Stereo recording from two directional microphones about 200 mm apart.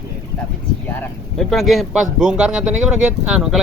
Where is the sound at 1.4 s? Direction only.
Centre (ahead or behind).